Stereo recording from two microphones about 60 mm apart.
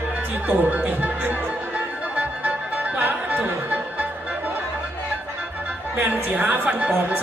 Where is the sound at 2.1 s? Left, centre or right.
Right.